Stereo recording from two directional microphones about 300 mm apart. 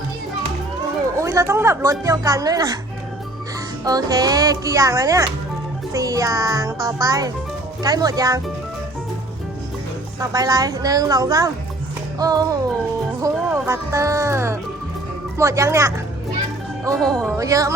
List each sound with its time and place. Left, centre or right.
1.1 s a woman's voice: centre
3.8 s a woman's voice: centre
10.2 s a woman's voice: centre
16.9 s speech: centre
17.3 s a woman's voice: centre